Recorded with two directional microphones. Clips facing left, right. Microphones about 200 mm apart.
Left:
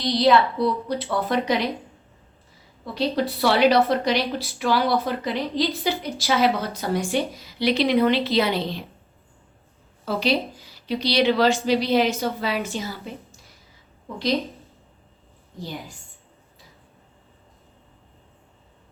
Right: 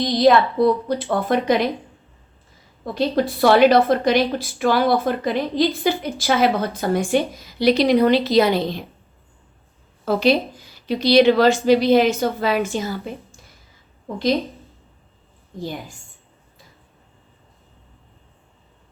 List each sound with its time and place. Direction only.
0.0 s a woman's voice: 50° right (ahead or behind)
2.8 s a woman's voice: 50° right (ahead or behind)
10.1 s a woman's voice: 50° right (ahead or behind)